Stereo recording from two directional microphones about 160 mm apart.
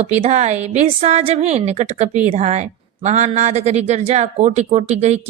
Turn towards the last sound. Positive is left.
turn(degrees=-45)  # may be behind; listen again after turning